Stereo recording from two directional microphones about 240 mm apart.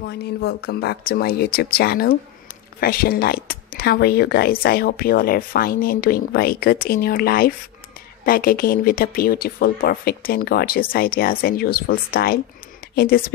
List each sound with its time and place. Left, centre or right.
0.0 s speech: left